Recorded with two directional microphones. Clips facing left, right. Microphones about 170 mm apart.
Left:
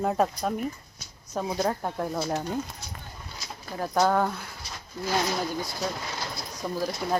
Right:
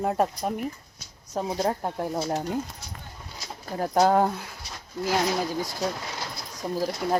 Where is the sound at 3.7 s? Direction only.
40° right (ahead or behind).